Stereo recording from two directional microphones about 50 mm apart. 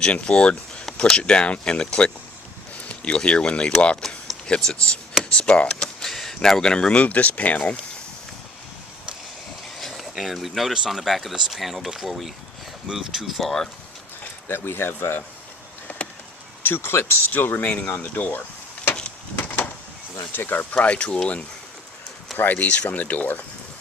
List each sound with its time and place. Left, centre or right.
0.0 s speech: left
4.0 s speech: centre; by 7.6 s left
9.7 s speech: centre
14.4 s speech: left
15.9 s a sound: left
16.6 s speech: left
17.2 s speech: left
17.7 s speech: left
17.9 s speech: left
20.3 s speech: left
20.7 s speech: left
22.4 s speech: left